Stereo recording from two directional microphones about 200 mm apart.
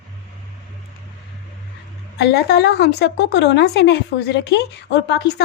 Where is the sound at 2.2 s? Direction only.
55° left (ahead or behind).